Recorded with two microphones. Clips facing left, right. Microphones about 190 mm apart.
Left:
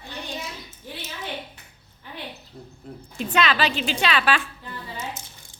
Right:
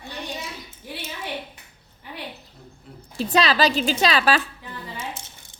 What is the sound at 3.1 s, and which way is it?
A woman's voice, 35° right (ahead or behind).